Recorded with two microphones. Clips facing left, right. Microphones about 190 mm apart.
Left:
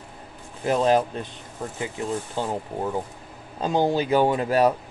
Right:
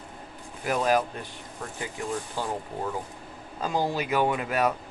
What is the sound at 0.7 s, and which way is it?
Speech, 25° left (ahead or behind).